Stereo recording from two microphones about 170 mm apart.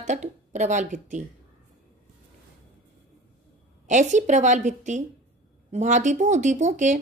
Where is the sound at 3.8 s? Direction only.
45° right (ahead or behind).